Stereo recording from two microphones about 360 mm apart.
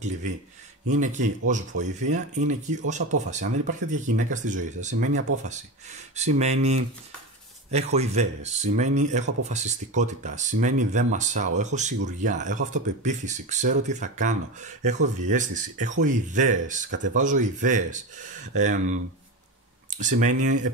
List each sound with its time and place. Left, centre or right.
0.8 s speech: centre
20.0 s speech: right